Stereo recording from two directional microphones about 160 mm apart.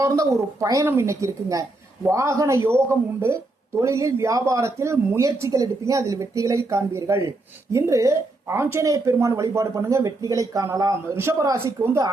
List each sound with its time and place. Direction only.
0.0 s speech: 20° right (ahead or behind)